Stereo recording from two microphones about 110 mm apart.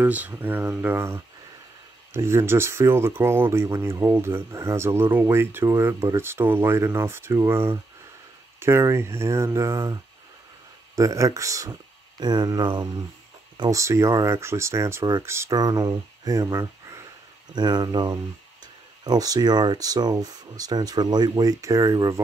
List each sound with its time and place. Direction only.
0.0 s speech: 15° right (ahead or behind); by 9.9 s 30° right (ahead or behind)
11.0 s speech: 30° right (ahead or behind)
13.6 s speech: 30° right (ahead or behind)
17.6 s speech: 40° right (ahead or behind)